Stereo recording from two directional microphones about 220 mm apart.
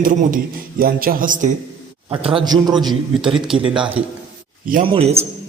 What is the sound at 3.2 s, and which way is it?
Speech, 5° right (ahead or behind).